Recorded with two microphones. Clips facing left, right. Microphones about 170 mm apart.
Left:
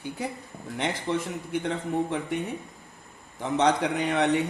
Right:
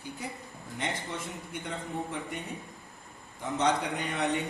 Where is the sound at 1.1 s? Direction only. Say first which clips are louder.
Left 10 dB; 90° left.